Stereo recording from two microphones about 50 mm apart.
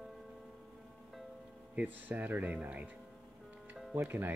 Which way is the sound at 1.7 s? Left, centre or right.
Right.